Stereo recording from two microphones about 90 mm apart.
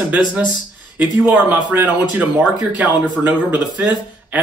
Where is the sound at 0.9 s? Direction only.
20° right (ahead or behind).